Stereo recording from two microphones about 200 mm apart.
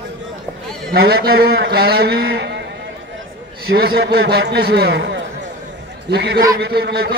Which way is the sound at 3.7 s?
50° right (ahead or behind).